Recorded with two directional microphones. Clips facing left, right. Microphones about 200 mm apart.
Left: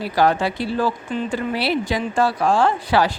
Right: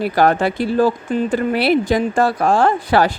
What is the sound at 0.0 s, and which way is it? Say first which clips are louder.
Speech: right 3 dB; 55° right (ahead or behind).